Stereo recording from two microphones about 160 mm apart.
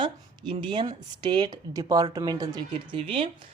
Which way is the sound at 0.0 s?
30° right (ahead or behind).